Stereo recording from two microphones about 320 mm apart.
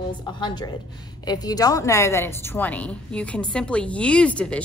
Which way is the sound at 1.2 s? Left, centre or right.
Centre.